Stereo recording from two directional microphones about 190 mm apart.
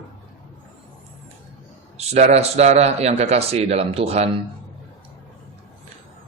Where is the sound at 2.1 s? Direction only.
35° right (ahead or behind).